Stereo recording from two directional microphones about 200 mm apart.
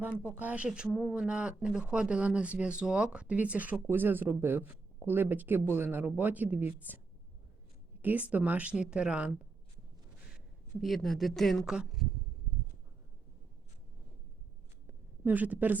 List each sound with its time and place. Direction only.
0.1 s speech: 10° left (ahead or behind)
0.3 s speech: 5° right (ahead or behind)
8.0 s speech: 5° right (ahead or behind)
10.8 s speech: centre (ahead or behind)
14.8 s a sound: 10° right (ahead or behind)